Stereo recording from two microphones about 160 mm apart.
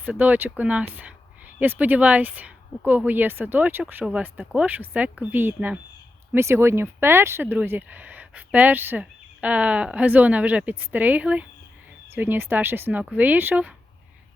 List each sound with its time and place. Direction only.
0.0 s speech: 10° right (ahead or behind)